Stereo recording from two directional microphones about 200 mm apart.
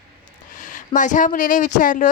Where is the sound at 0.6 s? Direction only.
40° left (ahead or behind).